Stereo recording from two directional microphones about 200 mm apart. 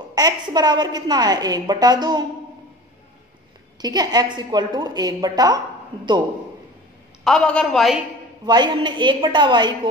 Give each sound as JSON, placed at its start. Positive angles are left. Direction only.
{"t": 0.1, "sound": "a woman's voice", "side_deg": -20}
{"t": 3.8, "sound": "a woman's voice", "side_deg": -20}
{"t": 7.2, "sound": "a woman's voice", "side_deg": 5}
{"t": 8.5, "sound": "a woman's voice", "side_deg": -20}